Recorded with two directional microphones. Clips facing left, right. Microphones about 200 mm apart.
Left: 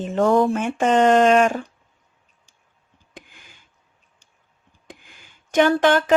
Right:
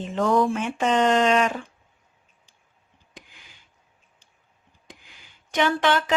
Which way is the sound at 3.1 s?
50° left (ahead or behind).